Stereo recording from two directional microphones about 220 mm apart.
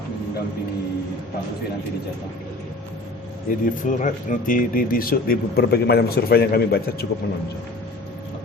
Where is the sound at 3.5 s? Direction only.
40° left (ahead or behind).